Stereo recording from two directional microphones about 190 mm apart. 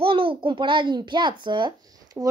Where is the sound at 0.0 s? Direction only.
30° right (ahead or behind).